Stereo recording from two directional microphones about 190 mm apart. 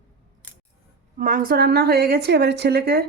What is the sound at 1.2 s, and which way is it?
A woman's voice, 45° right (ahead or behind).